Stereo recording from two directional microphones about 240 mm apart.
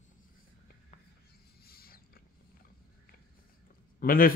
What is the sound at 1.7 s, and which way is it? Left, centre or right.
Mechanisms, left.